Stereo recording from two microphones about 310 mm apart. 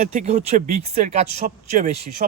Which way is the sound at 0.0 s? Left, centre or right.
Right.